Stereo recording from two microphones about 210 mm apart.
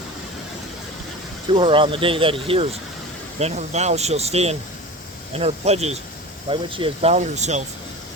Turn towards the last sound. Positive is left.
turn(degrees=-35)  # may be behind; listen again after turning